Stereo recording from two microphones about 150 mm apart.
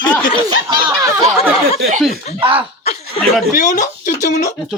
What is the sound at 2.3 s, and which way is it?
Speech, 35° right (ahead or behind).